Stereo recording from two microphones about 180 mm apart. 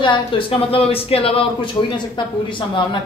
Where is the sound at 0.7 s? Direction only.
30° left (ahead or behind).